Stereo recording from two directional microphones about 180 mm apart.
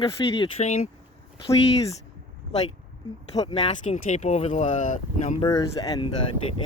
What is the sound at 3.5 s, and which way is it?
Speech, 35° left (ahead or behind).